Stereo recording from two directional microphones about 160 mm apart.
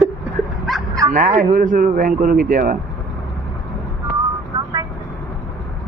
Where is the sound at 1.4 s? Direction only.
60° right (ahead or behind).